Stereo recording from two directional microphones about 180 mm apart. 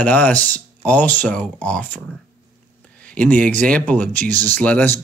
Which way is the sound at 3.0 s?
10° left (ahead or behind).